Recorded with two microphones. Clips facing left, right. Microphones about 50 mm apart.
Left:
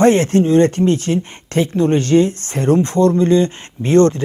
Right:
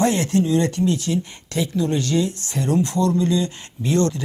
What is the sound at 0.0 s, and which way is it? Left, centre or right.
Speech, left.